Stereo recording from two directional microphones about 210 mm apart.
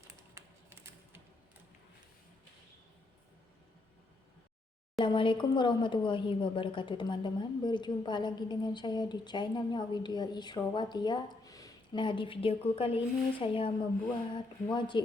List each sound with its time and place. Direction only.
0.4 s typing: 15° right (ahead or behind)
4.9 s a woman's voice: 25° left (ahead or behind)